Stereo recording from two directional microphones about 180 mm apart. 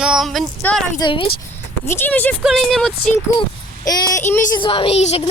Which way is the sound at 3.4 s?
20° left (ahead or behind).